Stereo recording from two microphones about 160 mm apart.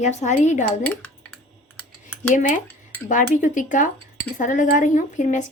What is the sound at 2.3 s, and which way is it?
A woman's voice, 55° left (ahead or behind).